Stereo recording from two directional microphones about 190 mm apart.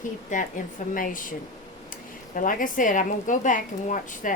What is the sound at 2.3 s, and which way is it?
Speech, 45° left (ahead or behind).